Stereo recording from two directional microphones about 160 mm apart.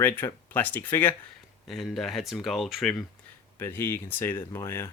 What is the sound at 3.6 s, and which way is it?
Speech, 15° left (ahead or behind).